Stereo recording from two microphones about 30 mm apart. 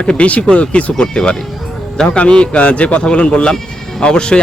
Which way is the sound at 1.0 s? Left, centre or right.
Left.